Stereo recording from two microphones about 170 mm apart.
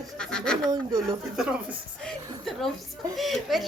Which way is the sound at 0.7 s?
20° right (ahead or behind).